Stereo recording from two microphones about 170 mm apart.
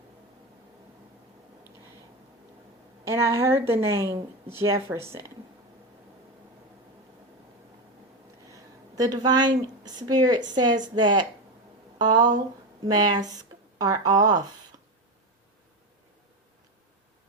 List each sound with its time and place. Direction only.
3.0 s a woman's voice: 15° right (ahead or behind)
8.4 s speech: 20° right (ahead or behind)